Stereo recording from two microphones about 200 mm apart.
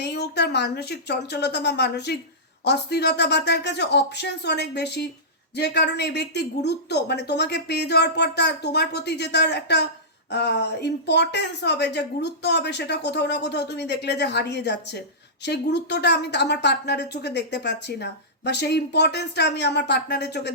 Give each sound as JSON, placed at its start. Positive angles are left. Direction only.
{"t": 0.0, "sound": "a woman's voice", "side_deg": 55}